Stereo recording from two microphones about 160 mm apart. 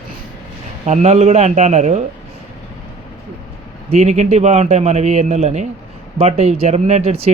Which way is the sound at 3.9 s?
40° right (ahead or behind).